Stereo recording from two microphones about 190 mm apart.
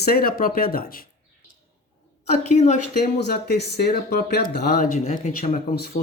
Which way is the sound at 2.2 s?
35° left (ahead or behind).